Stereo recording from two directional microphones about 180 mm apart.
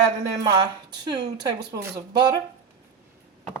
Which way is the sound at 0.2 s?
20° right (ahead or behind).